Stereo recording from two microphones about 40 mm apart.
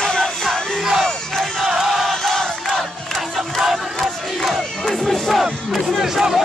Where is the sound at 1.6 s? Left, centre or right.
Centre.